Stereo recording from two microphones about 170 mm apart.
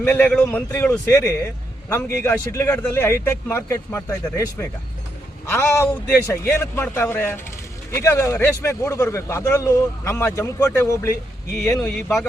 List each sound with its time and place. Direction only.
0.0 s a man's voice: 15° left (ahead or behind)
5.5 s a man's voice: 15° left (ahead or behind)
11.5 s speech: 5° left (ahead or behind)